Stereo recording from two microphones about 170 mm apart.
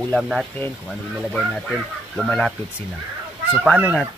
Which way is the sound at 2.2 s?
5° left (ahead or behind).